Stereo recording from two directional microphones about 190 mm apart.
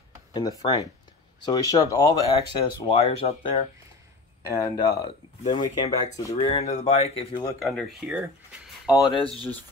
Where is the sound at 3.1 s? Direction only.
30° left (ahead or behind).